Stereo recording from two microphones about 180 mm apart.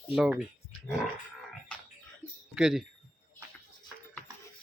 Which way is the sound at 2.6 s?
5° right (ahead or behind).